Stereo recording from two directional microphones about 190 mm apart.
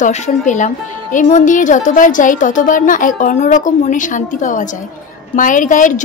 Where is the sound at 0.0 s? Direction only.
40° left (ahead or behind).